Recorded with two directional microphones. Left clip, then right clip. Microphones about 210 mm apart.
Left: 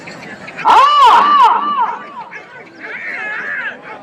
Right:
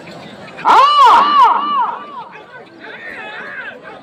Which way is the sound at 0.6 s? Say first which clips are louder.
Even; 45° left (ahead or behind).